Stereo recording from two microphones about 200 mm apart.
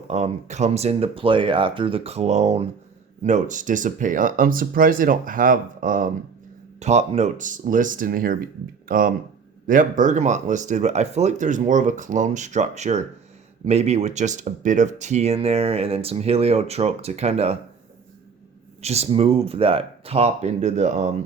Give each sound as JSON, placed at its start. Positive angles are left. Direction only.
{"t": 0.1, "sound": "speech", "side_deg": -35}
{"t": 18.8, "sound": "speech", "side_deg": -30}